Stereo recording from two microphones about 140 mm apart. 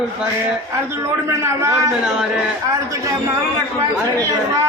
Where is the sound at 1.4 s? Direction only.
20° right (ahead or behind).